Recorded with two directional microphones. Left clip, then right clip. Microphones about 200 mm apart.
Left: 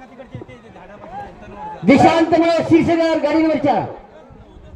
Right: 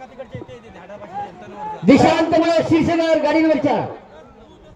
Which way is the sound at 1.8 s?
15° right (ahead or behind).